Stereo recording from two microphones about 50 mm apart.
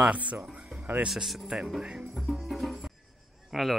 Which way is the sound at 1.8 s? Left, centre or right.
Centre.